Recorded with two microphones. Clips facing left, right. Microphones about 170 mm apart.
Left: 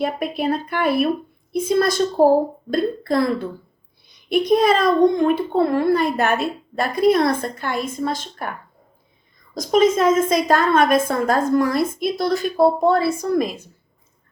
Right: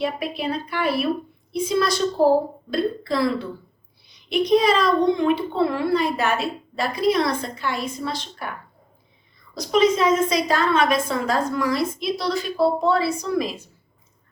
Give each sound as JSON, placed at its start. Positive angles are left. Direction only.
{"t": 0.0, "sound": "speech", "side_deg": 50}
{"t": 9.6, "sound": "speech", "side_deg": 45}